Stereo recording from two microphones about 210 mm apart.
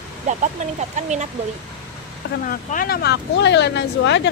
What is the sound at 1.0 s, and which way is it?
Speech, 35° right (ahead or behind).